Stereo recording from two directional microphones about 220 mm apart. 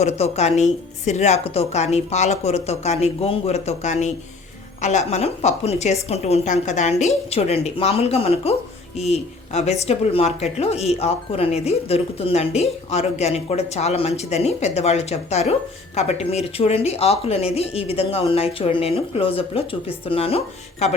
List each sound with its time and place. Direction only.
0.0 s a woman's voice: 30° left (ahead or behind)